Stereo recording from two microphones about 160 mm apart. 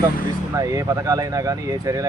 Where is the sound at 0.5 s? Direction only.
20° right (ahead or behind).